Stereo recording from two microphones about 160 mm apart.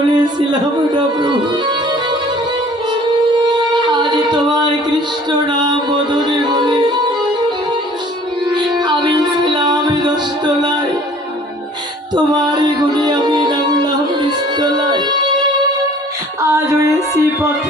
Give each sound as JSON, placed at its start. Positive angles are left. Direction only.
{"t": 0.1, "sound": "speech", "side_deg": -30}
{"t": 3.4, "sound": "singing", "side_deg": -30}
{"t": 8.4, "sound": "music", "side_deg": -25}
{"t": 12.1, "sound": "music", "side_deg": -25}
{"t": 16.4, "sound": "music", "side_deg": -20}